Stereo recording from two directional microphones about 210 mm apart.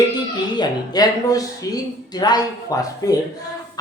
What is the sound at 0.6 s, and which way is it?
Speech, 20° left (ahead or behind).